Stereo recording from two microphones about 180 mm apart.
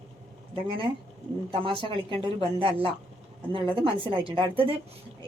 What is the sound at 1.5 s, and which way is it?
Speech, 30° right (ahead or behind).